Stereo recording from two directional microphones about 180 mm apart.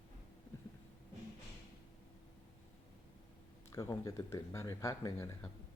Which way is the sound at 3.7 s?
20° left (ahead or behind).